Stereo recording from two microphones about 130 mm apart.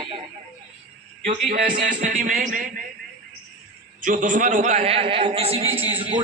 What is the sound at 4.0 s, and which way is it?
A man's voice, 85° right.